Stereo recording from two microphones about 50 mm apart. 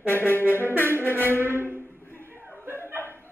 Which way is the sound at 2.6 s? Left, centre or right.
Right.